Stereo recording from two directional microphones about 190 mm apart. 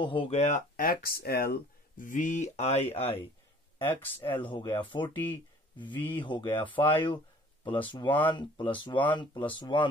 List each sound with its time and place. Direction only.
0.0 s speech: 25° left (ahead or behind)
5.1 s speech: 10° left (ahead or behind)
5.8 s speech: 25° left (ahead or behind)